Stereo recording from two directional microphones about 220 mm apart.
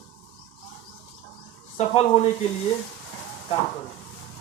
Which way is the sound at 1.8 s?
30° left (ahead or behind).